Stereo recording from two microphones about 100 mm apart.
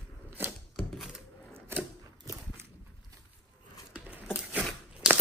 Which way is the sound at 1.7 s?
25° right (ahead or behind).